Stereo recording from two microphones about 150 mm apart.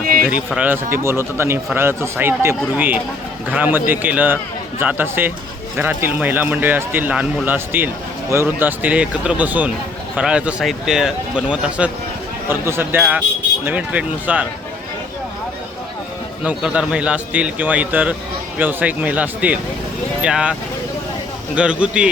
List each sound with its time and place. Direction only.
0.0 s a sound: 75° right (ahead or behind)
0.3 s speech: 10° right (ahead or behind)
16.4 s speech: 5° right (ahead or behind)